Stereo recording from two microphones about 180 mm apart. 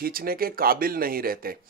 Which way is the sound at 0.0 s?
55° right (ahead or behind).